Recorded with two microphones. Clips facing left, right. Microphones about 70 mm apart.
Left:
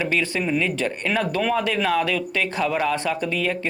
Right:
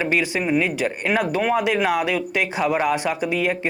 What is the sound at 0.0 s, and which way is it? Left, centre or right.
Speech, centre.